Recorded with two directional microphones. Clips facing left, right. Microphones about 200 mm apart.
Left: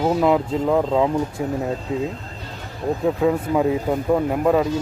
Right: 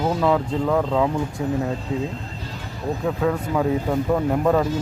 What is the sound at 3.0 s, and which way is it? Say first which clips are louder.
Speech: left 3 dB; 15° left (ahead or behind).